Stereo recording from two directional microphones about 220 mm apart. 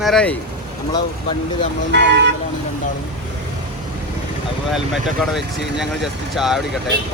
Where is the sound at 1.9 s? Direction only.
50° right (ahead or behind).